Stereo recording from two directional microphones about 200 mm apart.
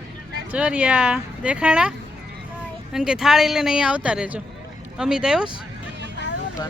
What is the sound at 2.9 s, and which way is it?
Speech, centre (ahead or behind).